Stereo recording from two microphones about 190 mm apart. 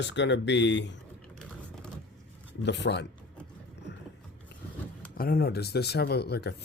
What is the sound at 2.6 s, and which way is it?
Speech, 65° left (ahead or behind).